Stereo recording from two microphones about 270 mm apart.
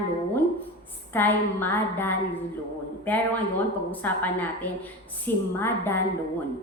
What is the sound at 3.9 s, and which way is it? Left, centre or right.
A woman's voice, centre.